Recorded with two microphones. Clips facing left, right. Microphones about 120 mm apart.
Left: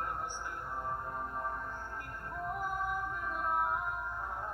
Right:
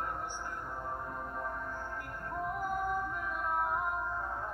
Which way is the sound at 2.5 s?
45° right (ahead or behind).